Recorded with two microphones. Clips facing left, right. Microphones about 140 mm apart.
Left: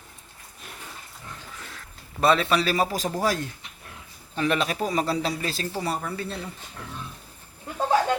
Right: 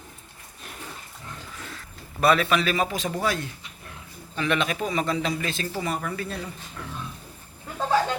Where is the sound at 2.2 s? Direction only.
30° left (ahead or behind).